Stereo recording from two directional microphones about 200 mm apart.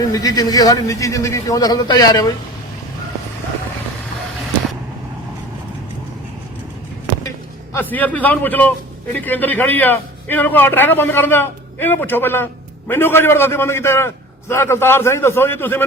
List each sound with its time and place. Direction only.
0.0 s a man's voice: 15° left (ahead or behind)
7.7 s a man's voice: 10° left (ahead or behind)